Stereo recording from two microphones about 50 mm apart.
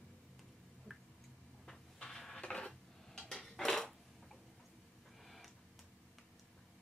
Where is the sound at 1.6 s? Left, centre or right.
Centre.